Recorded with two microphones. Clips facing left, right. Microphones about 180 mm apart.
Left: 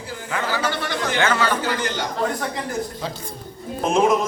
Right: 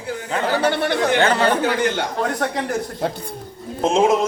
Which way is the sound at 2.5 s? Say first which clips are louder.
Right 3 dB; 70° right (ahead or behind).